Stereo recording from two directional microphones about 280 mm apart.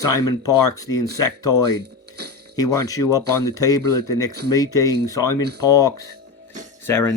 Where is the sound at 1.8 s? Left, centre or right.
Right.